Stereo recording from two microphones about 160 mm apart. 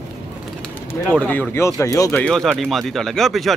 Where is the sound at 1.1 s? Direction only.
10° left (ahead or behind).